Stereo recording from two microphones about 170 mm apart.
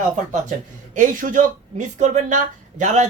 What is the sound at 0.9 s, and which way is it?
Speech, 50° right (ahead or behind).